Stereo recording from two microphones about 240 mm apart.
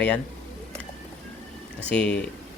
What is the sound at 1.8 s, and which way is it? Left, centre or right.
Speech, centre.